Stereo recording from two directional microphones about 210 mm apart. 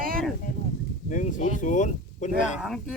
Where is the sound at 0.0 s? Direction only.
45° right (ahead or behind).